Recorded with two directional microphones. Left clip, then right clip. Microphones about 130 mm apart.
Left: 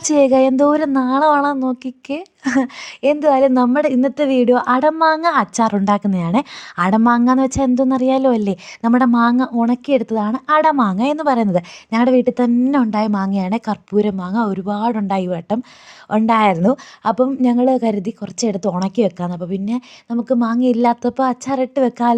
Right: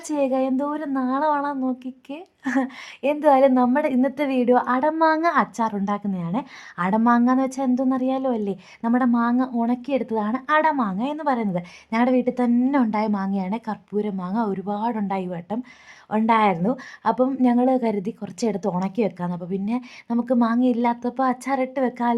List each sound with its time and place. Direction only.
0.0 s a woman's voice: 50° left (ahead or behind)
12.5 s speech: 20° left (ahead or behind)
12.7 s a woman's voice: 35° left (ahead or behind)
16.5 s speech: 55° left (ahead or behind)
16.7 s speech: 35° left (ahead or behind)
20.1 s speech: 15° left (ahead or behind); by 22.1 s 35° left (ahead or behind)